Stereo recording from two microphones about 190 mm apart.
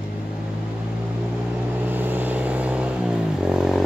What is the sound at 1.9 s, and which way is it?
Vehicle, 10° right (ahead or behind).